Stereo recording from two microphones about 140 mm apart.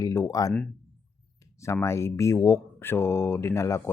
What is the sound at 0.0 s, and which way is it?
Speech, 25° left (ahead or behind).